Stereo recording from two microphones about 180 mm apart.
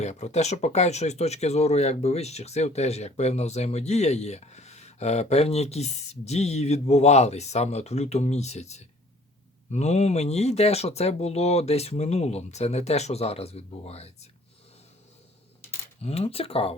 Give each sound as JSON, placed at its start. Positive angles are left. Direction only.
{"t": 0.0, "sound": "speech", "side_deg": 40}
{"t": 16.0, "sound": "speech", "side_deg": 35}